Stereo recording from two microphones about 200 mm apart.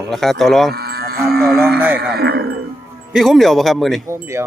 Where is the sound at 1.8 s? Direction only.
10° right (ahead or behind).